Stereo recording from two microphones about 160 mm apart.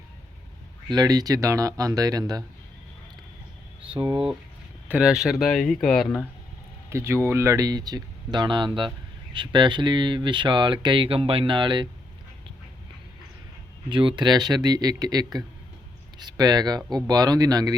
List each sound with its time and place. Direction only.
0.9 s speech: 25° right (ahead or behind)
4.1 s speech: 5° right (ahead or behind)
6.9 s speech: 15° right (ahead or behind)
13.9 s speech: 30° right (ahead or behind)